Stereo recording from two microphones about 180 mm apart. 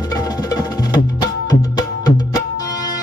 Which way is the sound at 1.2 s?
20° left (ahead or behind).